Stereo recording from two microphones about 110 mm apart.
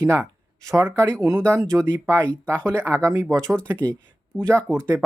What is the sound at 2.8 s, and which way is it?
Speech, 25° right (ahead or behind).